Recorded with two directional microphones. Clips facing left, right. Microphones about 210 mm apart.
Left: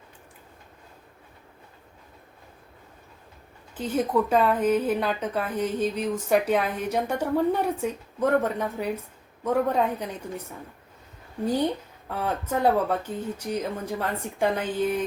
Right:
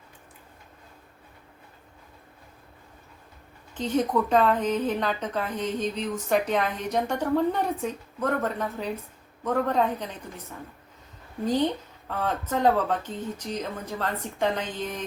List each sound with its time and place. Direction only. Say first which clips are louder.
3.8 s speech: even; 5° left (ahead or behind)
12.0 s speech: even; 10° left (ahead or behind)